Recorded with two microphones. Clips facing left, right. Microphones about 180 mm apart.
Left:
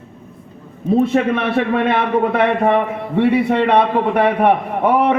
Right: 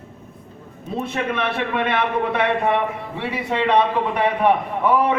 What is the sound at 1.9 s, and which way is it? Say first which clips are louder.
Speech: left 5 dB; 45° left (ahead or behind).